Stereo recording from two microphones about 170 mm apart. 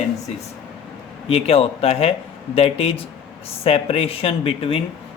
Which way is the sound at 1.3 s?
35° left (ahead or behind).